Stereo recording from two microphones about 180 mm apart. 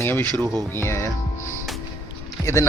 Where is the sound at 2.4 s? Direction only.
15° left (ahead or behind).